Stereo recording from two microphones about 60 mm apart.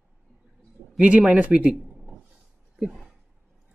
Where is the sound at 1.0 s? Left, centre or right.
Right.